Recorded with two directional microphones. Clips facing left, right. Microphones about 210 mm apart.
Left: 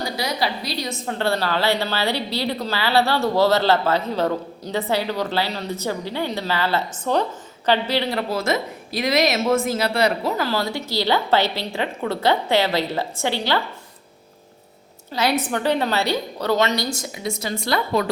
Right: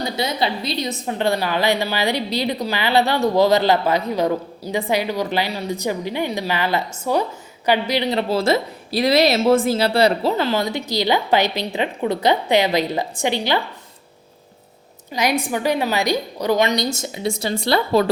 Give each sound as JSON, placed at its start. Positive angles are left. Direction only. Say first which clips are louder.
{"t": 0.0, "sound": "a woman's voice", "louder": "right 2 dB", "side_deg": -25}
{"t": 8.3, "sound": "speech", "louder": "right 4 dB", "side_deg": -30}
{"t": 15.1, "sound": "a woman's voice", "louder": "right 1 dB", "side_deg": -15}